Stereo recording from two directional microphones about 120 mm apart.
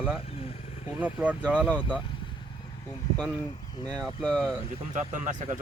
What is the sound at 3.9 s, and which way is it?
Speech, 20° right (ahead or behind).